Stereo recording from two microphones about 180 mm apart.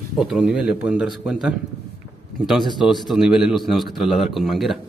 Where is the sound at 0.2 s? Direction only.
5° right (ahead or behind).